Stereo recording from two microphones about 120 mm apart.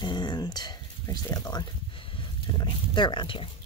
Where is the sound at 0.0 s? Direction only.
40° left (ahead or behind).